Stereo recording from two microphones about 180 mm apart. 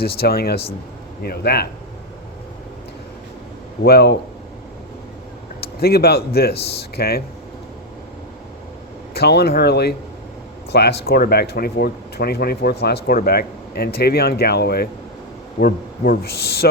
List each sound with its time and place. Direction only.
0.0 s speech: 60° left (ahead or behind)
3.8 s speech: 65° left (ahead or behind)
5.5 s speech: 60° left (ahead or behind)
9.1 s speech: 65° left (ahead or behind)